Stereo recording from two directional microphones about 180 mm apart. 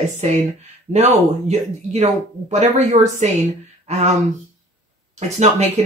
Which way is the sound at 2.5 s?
40° right (ahead or behind).